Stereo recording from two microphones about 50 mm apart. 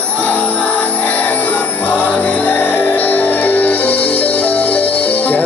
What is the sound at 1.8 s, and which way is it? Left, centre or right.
Music, left.